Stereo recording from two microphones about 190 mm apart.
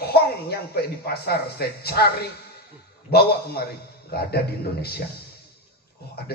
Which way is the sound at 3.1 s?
55° left (ahead or behind).